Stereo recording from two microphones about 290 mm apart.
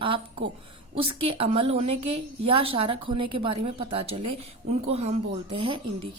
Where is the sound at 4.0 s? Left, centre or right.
Right.